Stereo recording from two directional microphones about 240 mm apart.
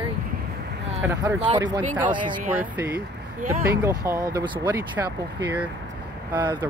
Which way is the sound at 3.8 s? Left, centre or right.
Centre.